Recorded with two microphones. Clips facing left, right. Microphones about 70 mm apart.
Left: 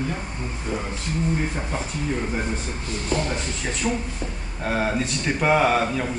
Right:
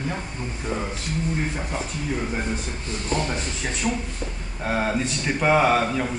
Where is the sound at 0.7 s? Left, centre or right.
Right.